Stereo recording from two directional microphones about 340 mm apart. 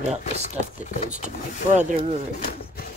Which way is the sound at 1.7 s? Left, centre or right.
Right.